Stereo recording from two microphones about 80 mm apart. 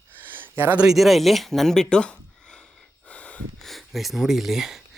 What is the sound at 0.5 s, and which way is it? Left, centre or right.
Speech, right.